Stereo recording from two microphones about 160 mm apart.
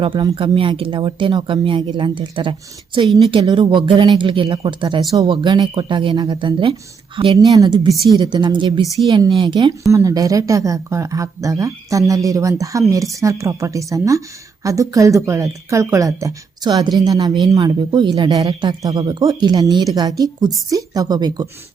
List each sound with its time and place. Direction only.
0.0 s speech: 35° right (ahead or behind)